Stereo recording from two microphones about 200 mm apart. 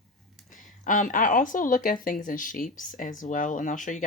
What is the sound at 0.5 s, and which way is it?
Speech, 40° left (ahead or behind).